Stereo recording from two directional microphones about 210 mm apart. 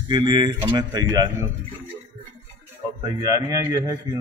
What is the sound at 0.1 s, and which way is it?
A man's voice, 20° right (ahead or behind).